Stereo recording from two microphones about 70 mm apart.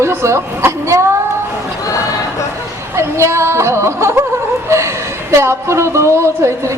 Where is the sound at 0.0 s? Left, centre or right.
Right.